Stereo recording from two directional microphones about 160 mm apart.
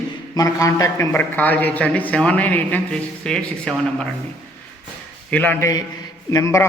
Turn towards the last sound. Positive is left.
turn(degrees=20)  # may be behind; listen again after turning